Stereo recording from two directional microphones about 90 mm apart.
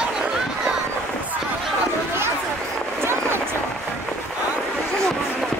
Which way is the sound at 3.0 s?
25° right (ahead or behind).